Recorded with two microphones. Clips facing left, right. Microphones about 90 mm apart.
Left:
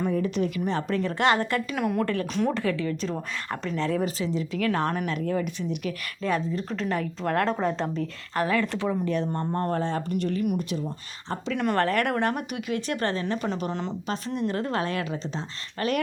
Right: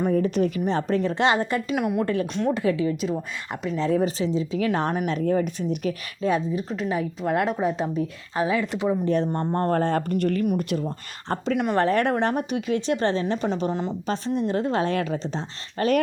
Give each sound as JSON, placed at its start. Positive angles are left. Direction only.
{"t": 0.0, "sound": "speech", "side_deg": -40}
{"t": 0.7, "sound": "speech", "side_deg": -30}
{"t": 1.8, "sound": "speech", "side_deg": -10}
{"t": 3.8, "sound": "speech", "side_deg": -30}
{"t": 5.0, "sound": "speech", "side_deg": -35}
{"t": 6.2, "sound": "speech", "side_deg": -15}
{"t": 9.0, "sound": "speech", "side_deg": -35}
{"t": 9.3, "sound": "speech", "side_deg": -25}
{"t": 9.6, "sound": "speech", "side_deg": -50}
{"t": 11.5, "sound": "speech", "side_deg": -5}
{"t": 11.8, "sound": "speech", "side_deg": -20}
{"t": 14.1, "sound": "speech", "side_deg": -30}